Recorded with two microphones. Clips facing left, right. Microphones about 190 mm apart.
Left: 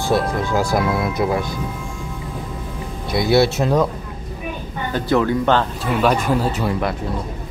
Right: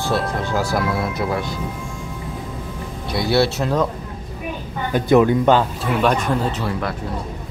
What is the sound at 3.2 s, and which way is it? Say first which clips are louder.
Speech: left 2 dB; 15° left (ahead or behind).